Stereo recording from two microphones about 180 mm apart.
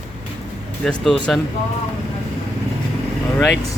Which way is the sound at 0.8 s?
5° left (ahead or behind).